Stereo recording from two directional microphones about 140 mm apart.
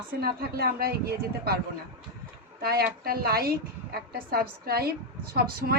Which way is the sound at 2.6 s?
90° right.